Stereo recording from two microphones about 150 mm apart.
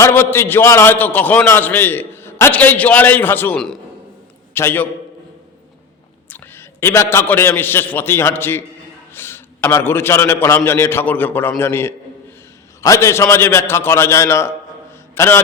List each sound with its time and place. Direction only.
0.0 s a man's voice: 15° left (ahead or behind)
6.3 s a man's voice: 15° left (ahead or behind)